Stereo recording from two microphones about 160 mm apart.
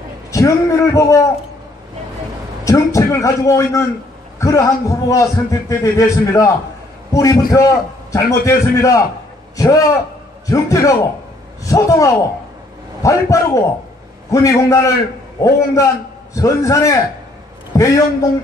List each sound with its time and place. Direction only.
0.3 s a man's voice: 20° left (ahead or behind)
2.6 s a man's voice: 20° left (ahead or behind)